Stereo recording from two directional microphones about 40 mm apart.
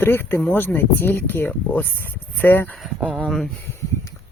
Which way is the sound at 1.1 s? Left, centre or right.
Left.